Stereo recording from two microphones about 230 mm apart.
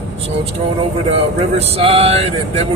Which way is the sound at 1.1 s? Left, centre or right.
Right.